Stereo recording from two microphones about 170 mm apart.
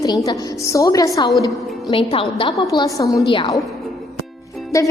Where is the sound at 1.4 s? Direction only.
30° left (ahead or behind).